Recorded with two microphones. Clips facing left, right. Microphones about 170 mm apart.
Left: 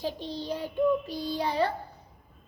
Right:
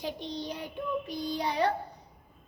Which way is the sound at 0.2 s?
15° right (ahead or behind).